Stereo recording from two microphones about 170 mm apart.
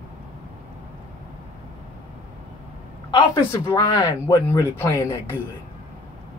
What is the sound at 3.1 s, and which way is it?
Speech, 20° left (ahead or behind).